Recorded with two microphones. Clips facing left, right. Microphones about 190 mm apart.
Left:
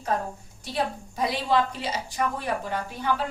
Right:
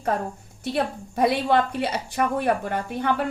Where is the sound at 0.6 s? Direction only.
60° right (ahead or behind).